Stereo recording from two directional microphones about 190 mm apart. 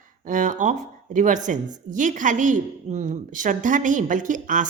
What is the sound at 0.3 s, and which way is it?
A woman's voice, 40° right (ahead or behind).